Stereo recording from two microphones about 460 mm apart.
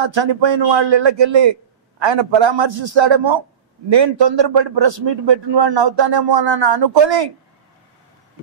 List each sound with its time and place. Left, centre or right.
0.0 s a man's voice: right